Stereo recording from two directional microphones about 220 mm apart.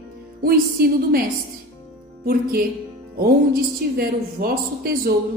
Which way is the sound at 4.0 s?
45° right (ahead or behind).